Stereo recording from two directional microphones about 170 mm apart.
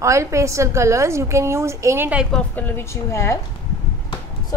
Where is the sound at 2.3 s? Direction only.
5° left (ahead or behind).